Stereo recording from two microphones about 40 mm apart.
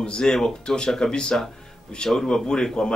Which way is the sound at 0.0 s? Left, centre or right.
Left.